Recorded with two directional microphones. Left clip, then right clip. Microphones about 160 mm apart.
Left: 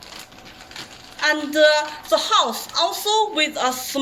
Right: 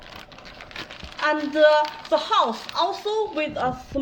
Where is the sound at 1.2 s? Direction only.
35° right (ahead or behind).